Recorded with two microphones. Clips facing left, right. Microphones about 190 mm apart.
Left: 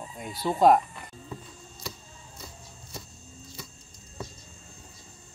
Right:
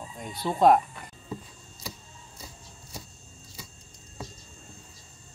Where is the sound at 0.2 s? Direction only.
5° left (ahead or behind).